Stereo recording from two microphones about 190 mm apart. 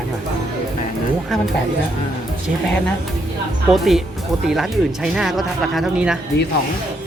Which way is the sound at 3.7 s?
Centre (ahead or behind).